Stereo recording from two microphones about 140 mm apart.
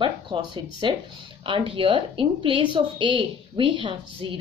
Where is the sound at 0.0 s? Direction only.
35° right (ahead or behind).